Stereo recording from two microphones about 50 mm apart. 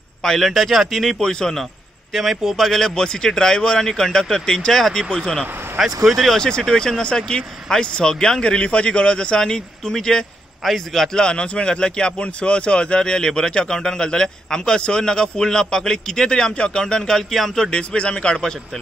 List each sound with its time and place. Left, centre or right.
0.2 s speech: centre
1.2 s a man's voice: centre
2.1 s a man's voice: centre
5.4 s speech: centre
6.3 s a man's voice: centre
11.1 s a man's voice: centre